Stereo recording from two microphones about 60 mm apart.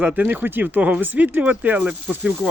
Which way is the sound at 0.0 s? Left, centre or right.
Right.